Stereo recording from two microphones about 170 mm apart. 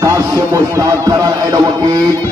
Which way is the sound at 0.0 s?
20° right (ahead or behind).